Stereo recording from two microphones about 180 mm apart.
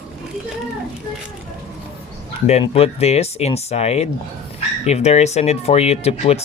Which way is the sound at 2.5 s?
35° left (ahead or behind).